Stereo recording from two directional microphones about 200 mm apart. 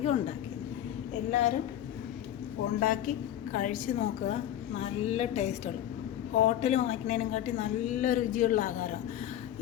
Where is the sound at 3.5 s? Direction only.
40° left (ahead or behind).